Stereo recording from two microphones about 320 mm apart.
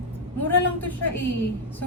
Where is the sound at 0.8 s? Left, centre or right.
Left.